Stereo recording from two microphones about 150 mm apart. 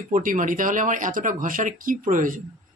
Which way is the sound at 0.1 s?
65° right (ahead or behind).